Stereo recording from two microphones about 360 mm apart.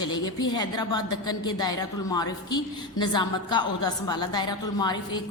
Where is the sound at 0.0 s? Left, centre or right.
Centre.